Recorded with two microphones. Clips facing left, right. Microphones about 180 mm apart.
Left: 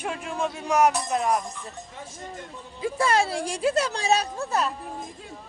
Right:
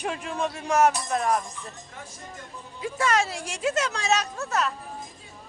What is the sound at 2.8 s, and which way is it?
Speech, 30° left (ahead or behind).